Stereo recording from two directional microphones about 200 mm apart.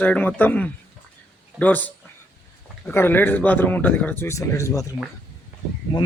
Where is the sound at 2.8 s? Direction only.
10° left (ahead or behind).